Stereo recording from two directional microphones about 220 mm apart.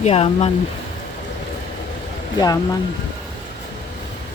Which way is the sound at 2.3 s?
15° left (ahead or behind).